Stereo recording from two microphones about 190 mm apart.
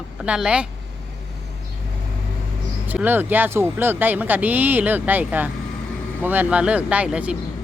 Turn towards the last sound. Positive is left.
turn(degrees=-5)  # may be behind; listen again after turning